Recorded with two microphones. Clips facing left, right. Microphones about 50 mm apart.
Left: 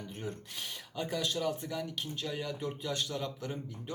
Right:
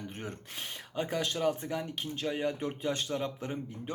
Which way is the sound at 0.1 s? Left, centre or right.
Right.